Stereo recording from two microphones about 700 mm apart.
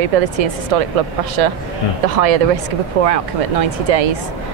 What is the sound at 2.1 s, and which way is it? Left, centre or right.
Speech, right.